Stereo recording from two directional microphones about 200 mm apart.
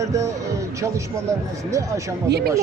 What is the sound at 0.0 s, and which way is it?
Speech, 15° right (ahead or behind).